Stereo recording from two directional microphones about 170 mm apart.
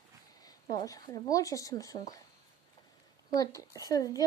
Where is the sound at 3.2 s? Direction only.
20° left (ahead or behind).